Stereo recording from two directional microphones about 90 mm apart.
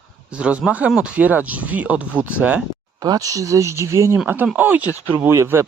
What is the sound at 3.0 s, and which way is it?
Speech, 45° right (ahead or behind).